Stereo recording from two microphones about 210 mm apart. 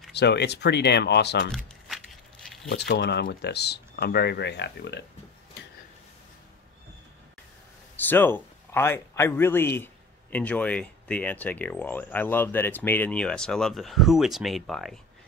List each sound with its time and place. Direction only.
0.1 s speech: 50° left (ahead or behind)
1.5 s shuffling cards: centre (ahead or behind)
2.7 s speech: 50° left (ahead or behind)
7.9 s a man's voice: 10° left (ahead or behind)